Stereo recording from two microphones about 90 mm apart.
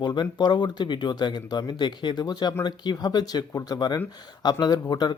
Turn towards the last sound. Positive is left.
turn(degrees=50)  # may be behind; listen again after turning